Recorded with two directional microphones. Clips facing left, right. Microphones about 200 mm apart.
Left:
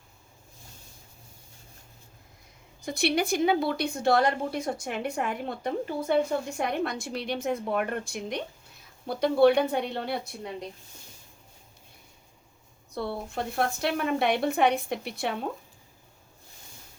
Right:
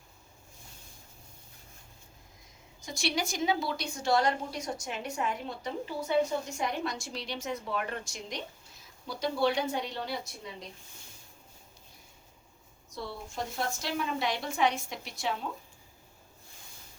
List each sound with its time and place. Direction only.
2.8 s a woman's voice: 60° left (ahead or behind)
12.9 s a woman's voice: 60° left (ahead or behind)